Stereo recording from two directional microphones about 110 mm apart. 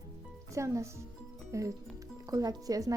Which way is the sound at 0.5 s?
25° right (ahead or behind).